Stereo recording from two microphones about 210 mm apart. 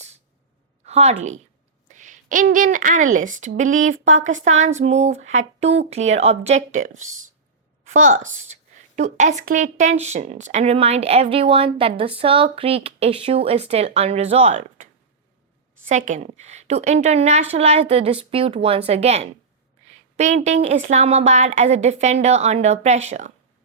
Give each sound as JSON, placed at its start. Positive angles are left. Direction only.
{"t": 0.9, "sound": "a woman's voice", "side_deg": -30}
{"t": 15.9, "sound": "a woman's voice", "side_deg": -35}